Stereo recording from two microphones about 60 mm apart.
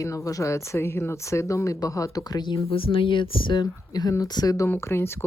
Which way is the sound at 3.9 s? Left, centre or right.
Left.